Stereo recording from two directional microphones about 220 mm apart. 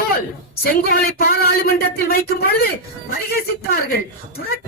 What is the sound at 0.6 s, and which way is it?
Speech, 45° left (ahead or behind).